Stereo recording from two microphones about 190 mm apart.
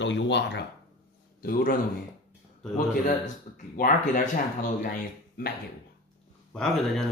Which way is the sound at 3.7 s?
45° left (ahead or behind).